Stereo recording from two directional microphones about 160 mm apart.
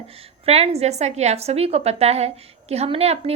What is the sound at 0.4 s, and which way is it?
A woman's voice, 40° right (ahead or behind).